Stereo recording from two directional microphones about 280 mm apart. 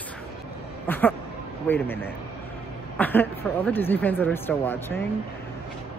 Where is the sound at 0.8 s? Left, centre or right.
Centre.